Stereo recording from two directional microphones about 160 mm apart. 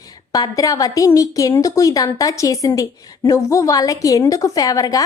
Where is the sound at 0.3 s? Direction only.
20° left (ahead or behind).